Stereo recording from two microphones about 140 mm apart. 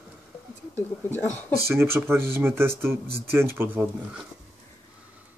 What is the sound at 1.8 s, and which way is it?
Speech, 15° right (ahead or behind).